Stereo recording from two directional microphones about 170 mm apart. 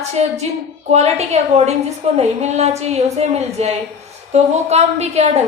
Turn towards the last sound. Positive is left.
turn(degrees=-40)  # may be behind; listen again after turning